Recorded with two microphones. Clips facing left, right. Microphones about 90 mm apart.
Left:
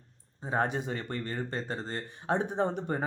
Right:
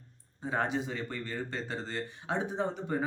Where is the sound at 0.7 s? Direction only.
50° left (ahead or behind).